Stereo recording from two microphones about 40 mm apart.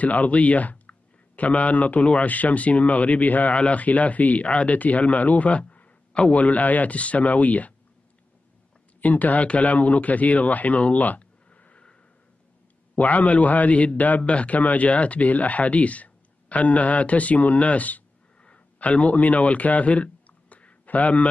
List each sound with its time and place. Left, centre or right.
0.0 s a man's voice: left
9.0 s speech: left
12.9 s a man's voice: left